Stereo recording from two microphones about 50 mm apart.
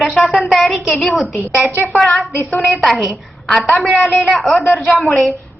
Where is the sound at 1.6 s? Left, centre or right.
Left.